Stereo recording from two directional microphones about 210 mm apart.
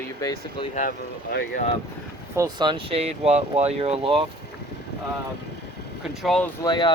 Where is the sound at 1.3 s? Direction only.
45° left (ahead or behind).